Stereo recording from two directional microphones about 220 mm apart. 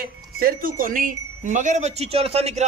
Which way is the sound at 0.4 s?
40° right (ahead or behind).